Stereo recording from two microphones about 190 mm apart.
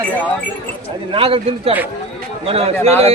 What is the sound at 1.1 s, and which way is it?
A man's voice, 30° right (ahead or behind).